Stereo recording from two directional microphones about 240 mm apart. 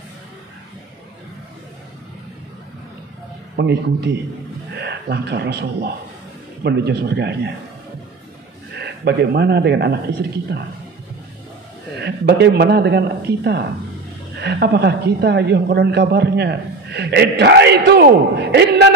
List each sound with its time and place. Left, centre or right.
3.5 s a woman's voice: right
8.7 s a woman's voice: right
12.0 s a woman's voice: right